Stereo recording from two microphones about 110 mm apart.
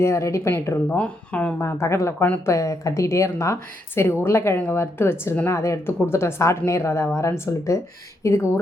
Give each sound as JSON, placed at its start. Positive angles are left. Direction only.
{"t": 0.0, "sound": "a woman's voice", "side_deg": 25}
{"t": 0.9, "sound": "speech", "side_deg": 10}
{"t": 1.5, "sound": "a woman's voice", "side_deg": 25}